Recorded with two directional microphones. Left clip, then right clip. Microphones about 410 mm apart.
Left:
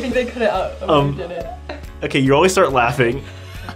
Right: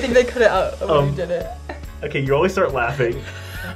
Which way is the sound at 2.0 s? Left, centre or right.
Left.